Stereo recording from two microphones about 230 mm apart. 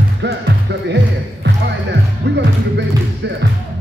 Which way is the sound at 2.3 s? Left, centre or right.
Right.